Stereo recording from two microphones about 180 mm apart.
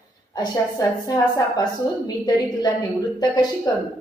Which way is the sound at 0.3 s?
20° left (ahead or behind).